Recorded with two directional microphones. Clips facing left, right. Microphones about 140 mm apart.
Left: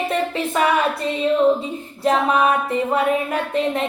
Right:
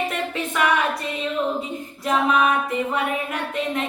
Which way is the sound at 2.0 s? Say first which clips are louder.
Left 3 dB; 35° left (ahead or behind).